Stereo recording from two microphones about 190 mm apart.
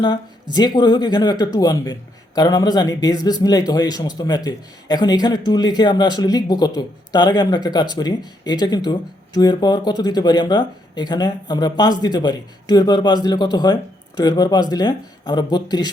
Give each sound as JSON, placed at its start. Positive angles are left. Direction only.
{"t": 0.5, "sound": "a man's voice", "side_deg": 20}